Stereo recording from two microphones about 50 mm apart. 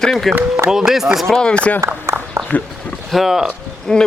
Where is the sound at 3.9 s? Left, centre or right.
Centre.